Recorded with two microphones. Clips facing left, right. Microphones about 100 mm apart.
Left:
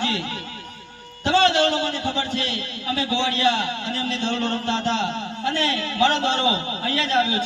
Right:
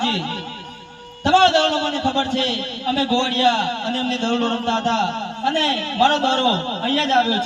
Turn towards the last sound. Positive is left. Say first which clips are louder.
# right 4 dB
turn(degrees=-60)  # may be behind; listen again after turning